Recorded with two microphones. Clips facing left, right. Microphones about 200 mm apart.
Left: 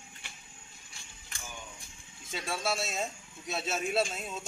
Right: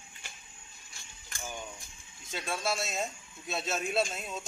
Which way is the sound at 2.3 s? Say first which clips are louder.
Even; 5° left (ahead or behind).